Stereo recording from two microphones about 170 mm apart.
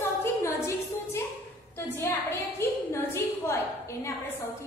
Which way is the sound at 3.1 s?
15° left (ahead or behind).